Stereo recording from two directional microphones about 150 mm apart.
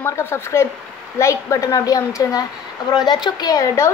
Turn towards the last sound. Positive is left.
turn(degrees=25)  # may be behind; listen again after turning